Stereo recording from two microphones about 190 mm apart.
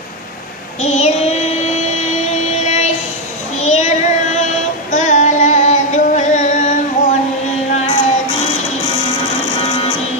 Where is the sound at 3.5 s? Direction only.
35° left (ahead or behind).